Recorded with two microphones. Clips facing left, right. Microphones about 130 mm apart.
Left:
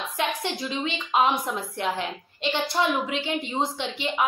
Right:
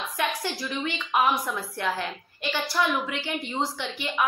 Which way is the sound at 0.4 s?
20° left (ahead or behind).